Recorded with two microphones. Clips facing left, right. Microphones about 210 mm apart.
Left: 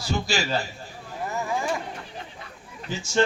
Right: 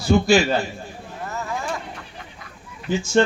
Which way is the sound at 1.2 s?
15° left (ahead or behind).